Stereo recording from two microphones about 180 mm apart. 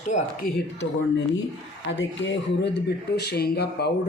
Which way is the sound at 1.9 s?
80° left.